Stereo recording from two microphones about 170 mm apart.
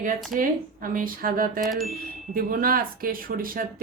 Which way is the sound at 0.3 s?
55° right (ahead or behind).